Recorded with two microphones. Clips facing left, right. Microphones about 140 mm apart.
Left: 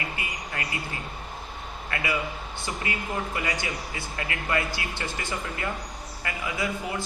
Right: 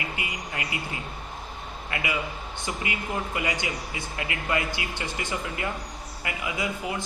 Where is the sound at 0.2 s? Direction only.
20° right (ahead or behind).